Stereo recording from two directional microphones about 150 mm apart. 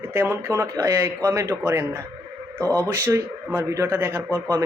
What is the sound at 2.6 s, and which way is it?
Speech, 10° left (ahead or behind).